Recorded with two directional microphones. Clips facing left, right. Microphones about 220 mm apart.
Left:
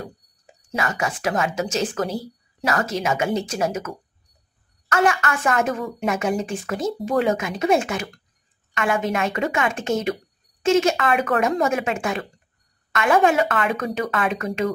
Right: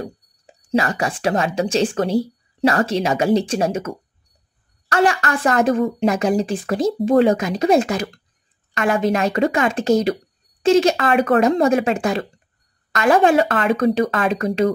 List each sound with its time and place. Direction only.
0.7 s speech: 35° right (ahead or behind)